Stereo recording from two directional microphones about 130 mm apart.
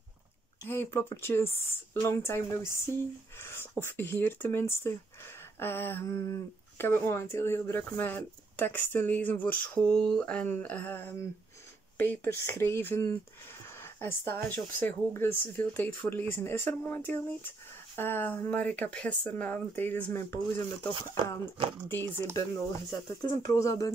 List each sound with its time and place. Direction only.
0.7 s speech: 20° left (ahead or behind)
22.3 s speech: 30° left (ahead or behind)